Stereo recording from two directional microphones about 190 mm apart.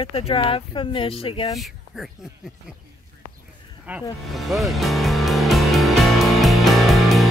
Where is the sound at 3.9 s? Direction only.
5° right (ahead or behind).